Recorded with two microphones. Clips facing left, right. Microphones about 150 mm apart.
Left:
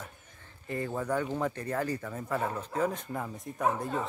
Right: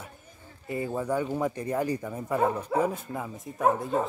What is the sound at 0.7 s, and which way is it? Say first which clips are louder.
Speech: right 3 dB; 10° right (ahead or behind).